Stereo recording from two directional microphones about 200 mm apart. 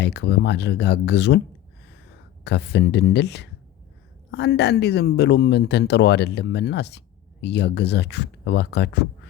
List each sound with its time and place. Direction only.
0.0 s speech: 55° left (ahead or behind)
2.4 s speech: 60° left (ahead or behind)